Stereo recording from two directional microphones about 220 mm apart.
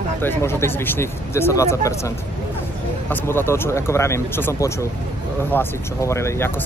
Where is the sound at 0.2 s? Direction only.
10° left (ahead or behind).